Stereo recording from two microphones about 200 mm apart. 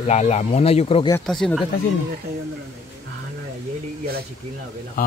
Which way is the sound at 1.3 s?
Centre (ahead or behind).